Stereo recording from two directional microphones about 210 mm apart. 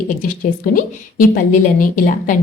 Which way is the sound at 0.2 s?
40° left (ahead or behind).